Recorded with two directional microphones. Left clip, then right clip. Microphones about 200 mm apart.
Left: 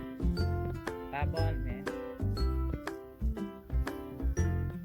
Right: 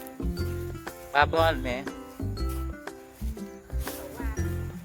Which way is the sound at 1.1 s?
15° right (ahead or behind).